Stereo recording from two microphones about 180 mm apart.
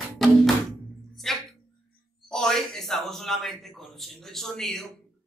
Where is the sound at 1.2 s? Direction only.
Centre (ahead or behind).